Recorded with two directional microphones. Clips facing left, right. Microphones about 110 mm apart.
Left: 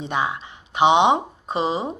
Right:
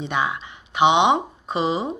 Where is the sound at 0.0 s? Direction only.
35° left (ahead or behind).